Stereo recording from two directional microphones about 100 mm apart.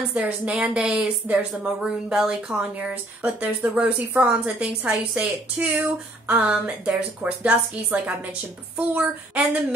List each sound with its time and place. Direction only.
0.1 s a woman's voice: 10° right (ahead or behind)